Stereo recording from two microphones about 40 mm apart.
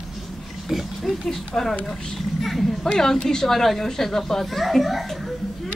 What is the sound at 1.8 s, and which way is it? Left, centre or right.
Speech, centre.